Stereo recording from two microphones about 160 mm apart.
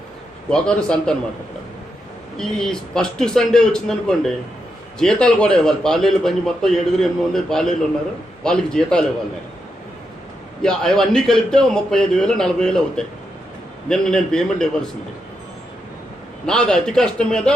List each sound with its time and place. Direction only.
0.5 s a man's voice: 5° left (ahead or behind)
2.4 s a man's voice: 5° left (ahead or behind)
10.6 s a man's voice: 5° left (ahead or behind)
16.5 s a man's voice: 5° left (ahead or behind)